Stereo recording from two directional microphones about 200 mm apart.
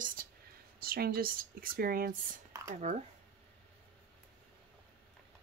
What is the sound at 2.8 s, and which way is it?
Speech, 35° right (ahead or behind).